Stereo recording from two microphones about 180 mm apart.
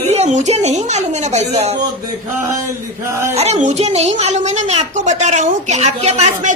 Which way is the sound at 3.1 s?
15° right (ahead or behind).